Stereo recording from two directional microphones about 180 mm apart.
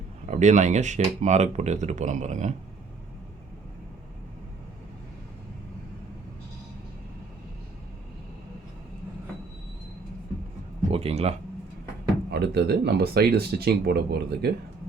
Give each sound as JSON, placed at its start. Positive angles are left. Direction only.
{"t": 0.3, "sound": "speech", "side_deg": -40}
{"t": 10.9, "sound": "a sound", "side_deg": -35}
{"t": 12.3, "sound": "speech", "side_deg": -65}